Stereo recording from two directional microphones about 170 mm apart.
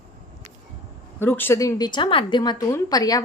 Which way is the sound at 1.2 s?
10° left (ahead or behind).